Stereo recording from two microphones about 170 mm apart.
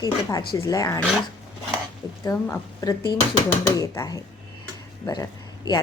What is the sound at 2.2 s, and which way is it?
Speech, 15° left (ahead or behind).